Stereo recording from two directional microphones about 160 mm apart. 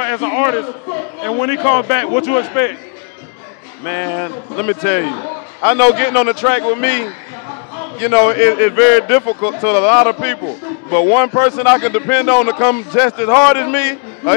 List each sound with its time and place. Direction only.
0.0 s speech: 15° left (ahead or behind)
3.8 s speech: 15° left (ahead or behind)